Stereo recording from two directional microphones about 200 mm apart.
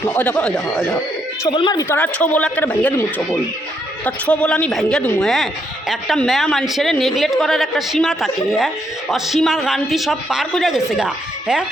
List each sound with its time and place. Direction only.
0.0 s speech: 10° left (ahead or behind)
1.5 s speech: 25° left (ahead or behind); by 2.9 s 5° left (ahead or behind)
4.0 s a woman's voice: 5° left (ahead or behind)